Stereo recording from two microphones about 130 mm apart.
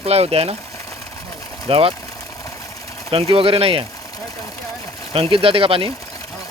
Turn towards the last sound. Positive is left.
turn(degrees=-45)  # may be behind; listen again after turning